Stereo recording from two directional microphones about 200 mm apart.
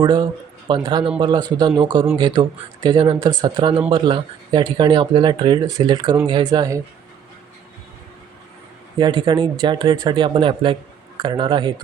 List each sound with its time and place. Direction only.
0.0 s speech: 20° right (ahead or behind)
9.0 s speech: 25° right (ahead or behind)